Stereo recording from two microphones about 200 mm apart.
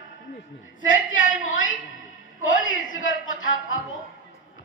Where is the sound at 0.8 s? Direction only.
75° left (ahead or behind).